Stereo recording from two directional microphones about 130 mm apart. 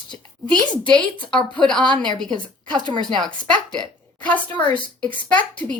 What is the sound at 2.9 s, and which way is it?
Speech, 35° right (ahead or behind).